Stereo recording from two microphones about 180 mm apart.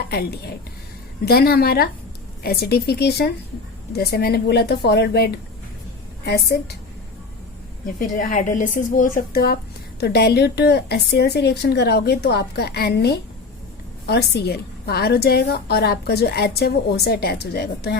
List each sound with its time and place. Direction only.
0.1 s a woman's voice: 60° left (ahead or behind)
7.9 s a woman's voice: 45° left (ahead or behind); by 18.0 s 65° left (ahead or behind)